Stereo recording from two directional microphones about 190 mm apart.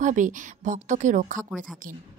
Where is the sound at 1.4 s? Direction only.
Centre (ahead or behind).